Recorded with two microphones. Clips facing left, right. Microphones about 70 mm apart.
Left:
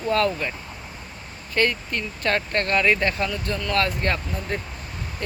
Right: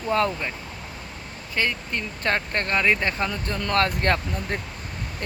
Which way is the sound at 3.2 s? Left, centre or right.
Right.